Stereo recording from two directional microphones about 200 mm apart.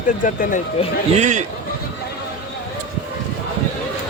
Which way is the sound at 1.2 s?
35° right (ahead or behind).